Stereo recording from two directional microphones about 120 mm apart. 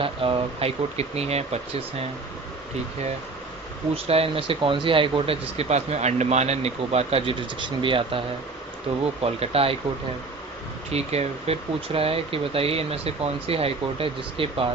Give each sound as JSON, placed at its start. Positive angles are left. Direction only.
{"t": 0.0, "sound": "speech", "side_deg": -50}
{"t": 3.9, "sound": "speech", "side_deg": -55}
{"t": 10.9, "sound": "speech", "side_deg": -60}